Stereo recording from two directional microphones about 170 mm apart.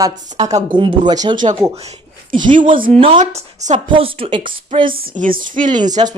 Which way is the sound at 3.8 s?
30° right (ahead or behind).